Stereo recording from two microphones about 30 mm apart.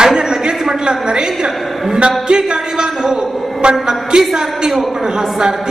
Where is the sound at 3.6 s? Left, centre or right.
Right.